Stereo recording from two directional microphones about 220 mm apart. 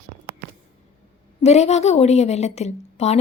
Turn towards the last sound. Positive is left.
turn(degrees=30)  # may be behind; listen again after turning